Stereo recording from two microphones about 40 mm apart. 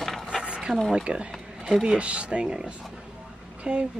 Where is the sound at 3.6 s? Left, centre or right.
Right.